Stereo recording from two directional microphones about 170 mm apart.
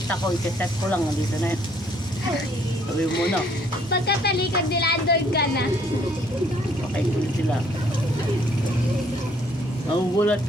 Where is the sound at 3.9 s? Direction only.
70° left (ahead or behind).